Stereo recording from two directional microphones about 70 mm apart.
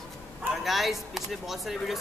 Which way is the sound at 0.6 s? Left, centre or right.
Centre.